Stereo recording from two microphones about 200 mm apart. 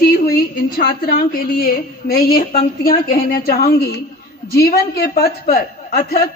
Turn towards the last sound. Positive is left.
turn(degrees=45)  # may be behind; listen again after turning